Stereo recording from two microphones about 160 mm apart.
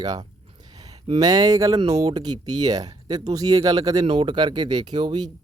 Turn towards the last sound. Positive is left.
turn(degrees=-25)  # may be behind; listen again after turning